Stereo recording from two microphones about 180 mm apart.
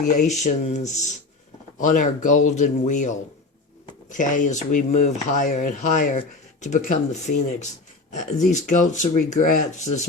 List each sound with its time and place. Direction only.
0.0 s speech: 45° left (ahead or behind)